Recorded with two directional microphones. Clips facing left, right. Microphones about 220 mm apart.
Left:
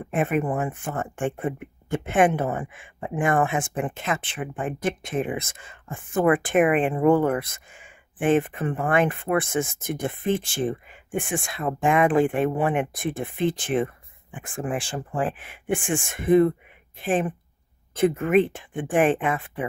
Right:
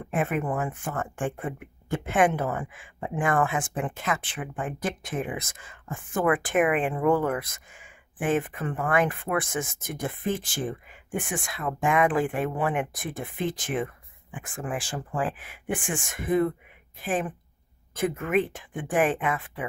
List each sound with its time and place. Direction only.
0.1 s speech: 20° left (ahead or behind)